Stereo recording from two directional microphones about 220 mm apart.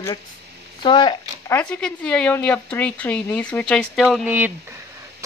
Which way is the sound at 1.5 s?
5° left (ahead or behind).